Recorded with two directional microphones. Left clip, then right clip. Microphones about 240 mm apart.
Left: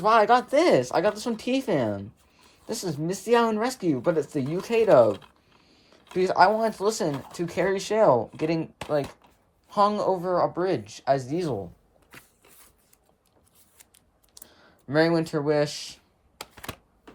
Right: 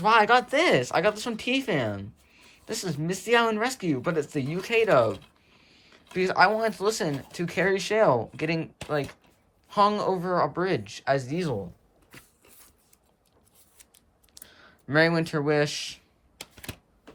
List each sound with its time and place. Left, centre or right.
0.0 s speech: centre
6.7 s speech: left
7.0 s speech: centre
14.8 s speech: centre
16.6 s typewriter: left